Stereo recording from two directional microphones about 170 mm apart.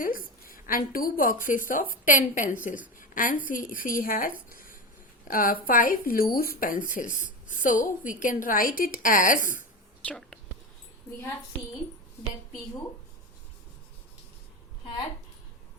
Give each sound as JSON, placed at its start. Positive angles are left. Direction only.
{"t": 0.0, "sound": "a woman's voice", "side_deg": 55}
{"t": 3.0, "sound": "a sound", "side_deg": 55}
{"t": 3.4, "sound": "speech", "side_deg": 55}
{"t": 4.4, "sound": "a sound", "side_deg": 55}
{"t": 5.3, "sound": "speech", "side_deg": 55}
{"t": 10.0, "sound": "speech", "side_deg": 5}